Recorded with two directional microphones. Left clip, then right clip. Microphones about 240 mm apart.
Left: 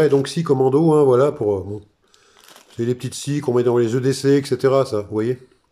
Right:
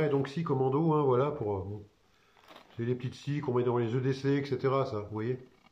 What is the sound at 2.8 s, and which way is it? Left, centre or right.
Speech, left.